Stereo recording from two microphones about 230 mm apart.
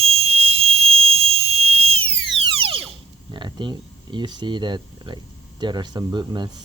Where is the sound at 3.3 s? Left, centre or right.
Centre.